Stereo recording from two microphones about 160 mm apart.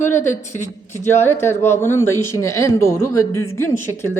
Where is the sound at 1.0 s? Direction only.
15° left (ahead or behind).